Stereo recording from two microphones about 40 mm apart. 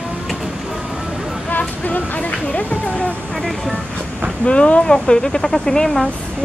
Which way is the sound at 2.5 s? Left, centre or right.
Left.